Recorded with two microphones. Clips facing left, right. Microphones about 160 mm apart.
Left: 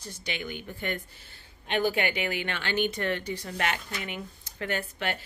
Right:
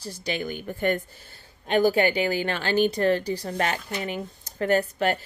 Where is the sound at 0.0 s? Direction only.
35° right (ahead or behind).